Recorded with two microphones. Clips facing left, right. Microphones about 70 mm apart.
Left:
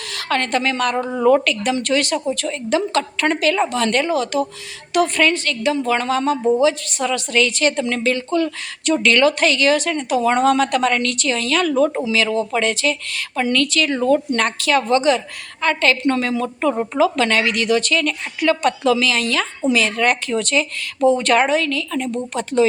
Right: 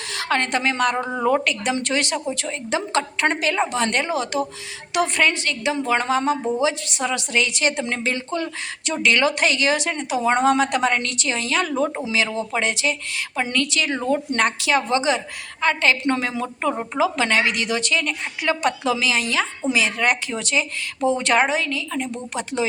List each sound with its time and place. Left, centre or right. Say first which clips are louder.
0.1 s a woman's voice: left 2 dB; right